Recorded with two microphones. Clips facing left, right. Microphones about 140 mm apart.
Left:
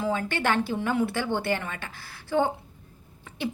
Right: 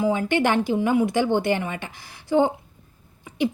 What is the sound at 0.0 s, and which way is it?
A woman's voice, 15° right (ahead or behind).